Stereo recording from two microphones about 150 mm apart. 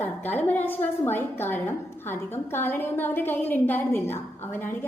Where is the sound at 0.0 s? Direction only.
10° left (ahead or behind).